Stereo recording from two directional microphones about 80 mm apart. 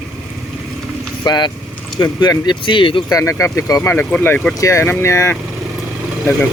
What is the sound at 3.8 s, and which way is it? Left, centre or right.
Speech, left.